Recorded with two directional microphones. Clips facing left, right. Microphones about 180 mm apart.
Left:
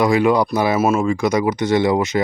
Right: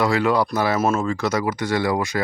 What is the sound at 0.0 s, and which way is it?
Speech, 15° left (ahead or behind).